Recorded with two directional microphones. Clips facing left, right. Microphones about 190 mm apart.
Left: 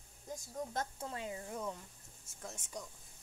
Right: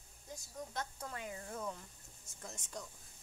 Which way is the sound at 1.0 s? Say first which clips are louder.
Left 3 dB; 25° left (ahead or behind).